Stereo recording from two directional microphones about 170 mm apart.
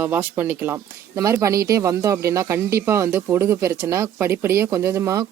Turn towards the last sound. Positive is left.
turn(degrees=-15)  # may be behind; listen again after turning